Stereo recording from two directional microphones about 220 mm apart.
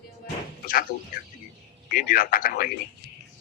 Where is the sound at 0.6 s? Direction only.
40° left (ahead or behind).